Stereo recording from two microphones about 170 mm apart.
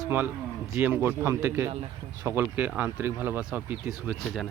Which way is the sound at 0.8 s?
10° right (ahead or behind).